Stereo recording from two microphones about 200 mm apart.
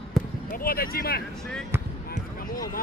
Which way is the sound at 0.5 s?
45° left (ahead or behind).